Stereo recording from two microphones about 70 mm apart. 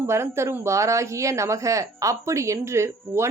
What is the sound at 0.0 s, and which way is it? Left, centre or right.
Speech, right.